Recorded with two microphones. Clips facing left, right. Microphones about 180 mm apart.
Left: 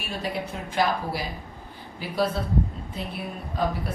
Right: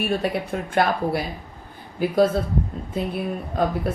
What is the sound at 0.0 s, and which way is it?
A woman's voice, 55° right (ahead or behind).